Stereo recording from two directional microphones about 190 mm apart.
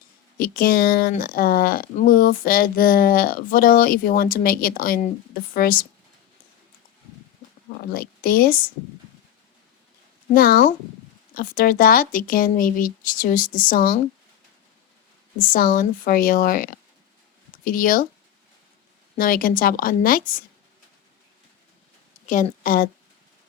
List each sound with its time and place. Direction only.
0.3 s speech: 50° left (ahead or behind)
7.8 s a woman's voice: 55° left (ahead or behind)
10.3 s speech: 50° left (ahead or behind)
15.4 s speech: 45° left (ahead or behind)
19.1 s speech: 50° left (ahead or behind)
22.3 s a woman's voice: 45° left (ahead or behind)